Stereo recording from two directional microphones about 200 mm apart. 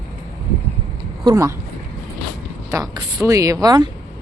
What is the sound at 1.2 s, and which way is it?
Speech, 15° right (ahead or behind).